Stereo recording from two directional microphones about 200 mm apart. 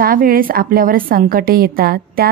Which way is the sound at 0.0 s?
45° right (ahead or behind).